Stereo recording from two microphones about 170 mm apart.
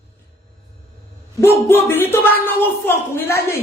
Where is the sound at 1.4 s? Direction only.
15° left (ahead or behind).